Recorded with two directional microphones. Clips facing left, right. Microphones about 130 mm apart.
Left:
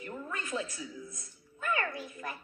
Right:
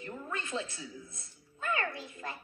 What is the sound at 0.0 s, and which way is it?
Speech, 25° right (ahead or behind).